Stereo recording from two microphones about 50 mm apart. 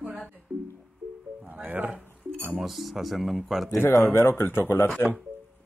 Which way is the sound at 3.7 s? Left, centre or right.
Left.